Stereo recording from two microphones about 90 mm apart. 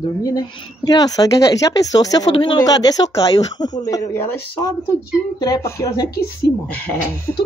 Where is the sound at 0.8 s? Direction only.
45° left (ahead or behind).